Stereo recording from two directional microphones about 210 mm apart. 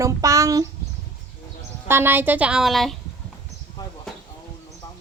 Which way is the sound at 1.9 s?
10° right (ahead or behind).